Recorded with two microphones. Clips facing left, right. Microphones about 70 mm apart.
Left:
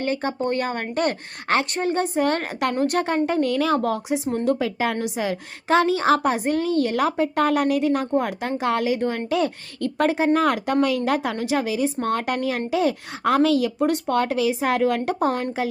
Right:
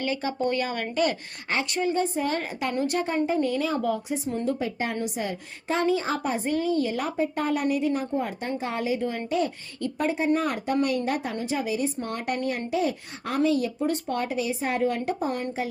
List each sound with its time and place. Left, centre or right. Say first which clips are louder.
0.0 s a woman's voice: left 3 dB; left
3.8 s a woman's voice: left 4 dB; left